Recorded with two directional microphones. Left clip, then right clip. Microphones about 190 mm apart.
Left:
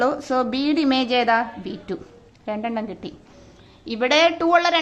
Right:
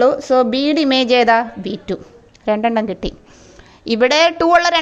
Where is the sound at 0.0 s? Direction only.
25° right (ahead or behind).